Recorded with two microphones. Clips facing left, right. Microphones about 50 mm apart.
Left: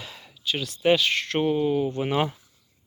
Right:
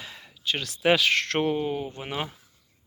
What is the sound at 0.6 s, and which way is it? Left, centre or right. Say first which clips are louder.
Speech: left 1 dB; right.